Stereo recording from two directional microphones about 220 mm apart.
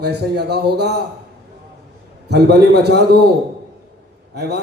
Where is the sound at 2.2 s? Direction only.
50° right (ahead or behind).